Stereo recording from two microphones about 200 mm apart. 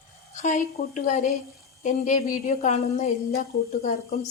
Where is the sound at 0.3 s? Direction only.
35° left (ahead or behind).